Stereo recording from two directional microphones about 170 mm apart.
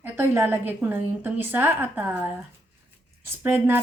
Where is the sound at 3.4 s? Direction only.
10° right (ahead or behind).